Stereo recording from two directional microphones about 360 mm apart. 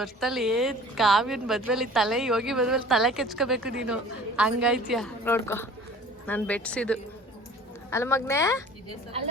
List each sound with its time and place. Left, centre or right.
0.0 s speech: centre